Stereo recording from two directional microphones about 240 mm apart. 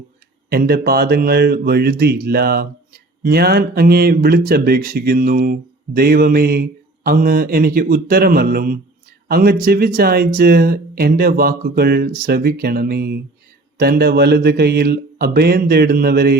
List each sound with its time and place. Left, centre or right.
0.5 s speech: right